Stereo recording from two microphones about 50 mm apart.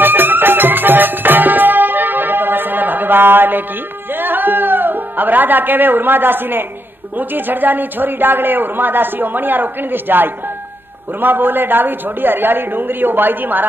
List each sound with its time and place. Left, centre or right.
0.0 s music: right
7.2 s a woman's voice: right